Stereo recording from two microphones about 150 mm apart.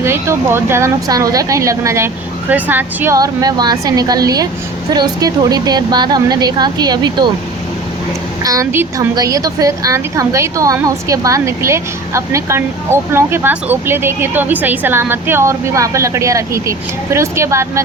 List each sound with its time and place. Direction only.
0.0 s a woman's voice: 15° right (ahead or behind)
3.2 s a woman's voice: 25° right (ahead or behind)
8.4 s a woman's voice: 20° right (ahead or behind)